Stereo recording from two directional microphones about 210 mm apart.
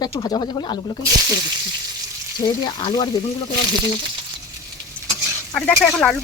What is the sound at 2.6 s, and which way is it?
Speech, 20° left (ahead or behind).